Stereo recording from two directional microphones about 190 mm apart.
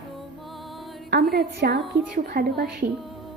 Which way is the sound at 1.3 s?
55° right (ahead or behind).